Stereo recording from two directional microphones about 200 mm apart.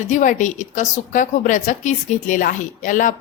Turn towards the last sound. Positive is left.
turn(degrees=40)  # may be behind; listen again after turning